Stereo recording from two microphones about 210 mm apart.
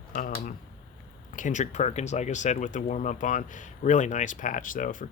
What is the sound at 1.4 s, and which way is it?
Speech, 35° left (ahead or behind).